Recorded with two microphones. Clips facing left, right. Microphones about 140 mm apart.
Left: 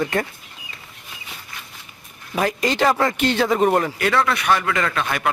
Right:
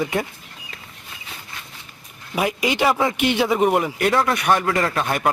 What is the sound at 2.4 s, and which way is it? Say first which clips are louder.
A man's voice: left 1 dB; 10° right (ahead or behind).